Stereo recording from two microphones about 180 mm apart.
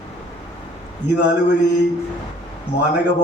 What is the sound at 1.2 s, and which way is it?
Speech, 75° left (ahead or behind).